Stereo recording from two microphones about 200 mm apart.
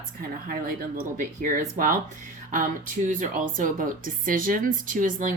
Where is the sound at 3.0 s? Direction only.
40° right (ahead or behind).